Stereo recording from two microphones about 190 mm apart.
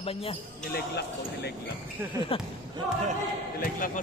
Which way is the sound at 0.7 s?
60° left (ahead or behind).